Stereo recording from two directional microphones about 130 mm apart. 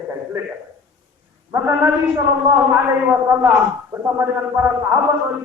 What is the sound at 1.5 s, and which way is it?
A man's voice, 20° right (ahead or behind).